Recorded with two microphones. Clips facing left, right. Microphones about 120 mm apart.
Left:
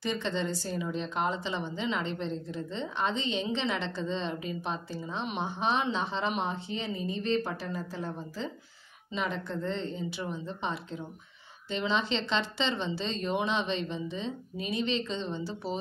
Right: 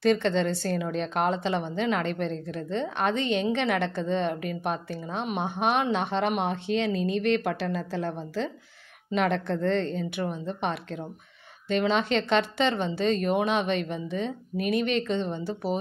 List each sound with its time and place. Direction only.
0.0 s a woman's voice: 65° right (ahead or behind)
9.9 s a woman's voice: 55° right (ahead or behind)